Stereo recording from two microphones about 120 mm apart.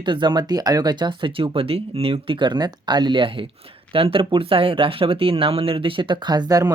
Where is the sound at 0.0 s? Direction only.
40° right (ahead or behind).